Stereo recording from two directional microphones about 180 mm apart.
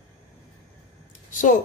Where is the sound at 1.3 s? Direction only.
45° left (ahead or behind).